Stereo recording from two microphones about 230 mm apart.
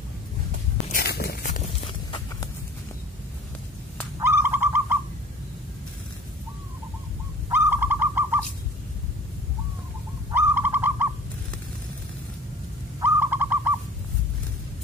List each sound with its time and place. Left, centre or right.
0.8 s a sound: left; by 2.5 s centre
4.2 s bird: centre
7.4 s bird: centre
10.3 s bird: centre
13.0 s bird: centre